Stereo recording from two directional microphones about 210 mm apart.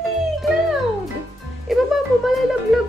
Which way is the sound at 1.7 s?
Centre (ahead or behind).